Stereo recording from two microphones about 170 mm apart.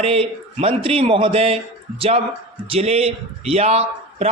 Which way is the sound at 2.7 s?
35° right (ahead or behind).